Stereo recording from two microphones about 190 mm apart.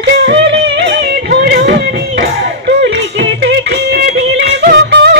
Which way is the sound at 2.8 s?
65° right (ahead or behind).